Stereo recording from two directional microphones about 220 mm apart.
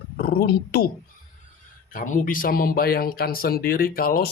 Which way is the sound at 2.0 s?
35° left (ahead or behind).